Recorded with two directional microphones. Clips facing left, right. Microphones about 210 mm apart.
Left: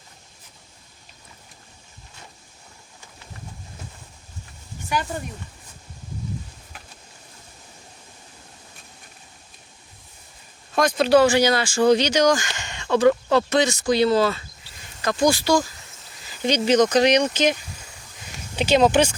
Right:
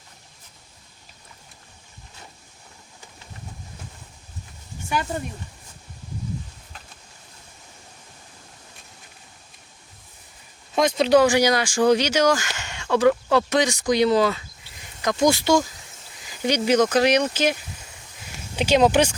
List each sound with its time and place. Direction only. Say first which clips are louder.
10.8 s speech: even; 20° right (ahead or behind)